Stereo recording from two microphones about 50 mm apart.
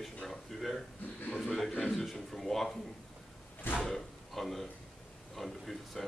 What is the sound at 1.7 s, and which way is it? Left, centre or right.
Speech, centre.